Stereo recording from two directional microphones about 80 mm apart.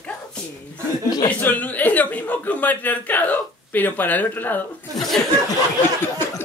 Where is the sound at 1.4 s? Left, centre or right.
Left.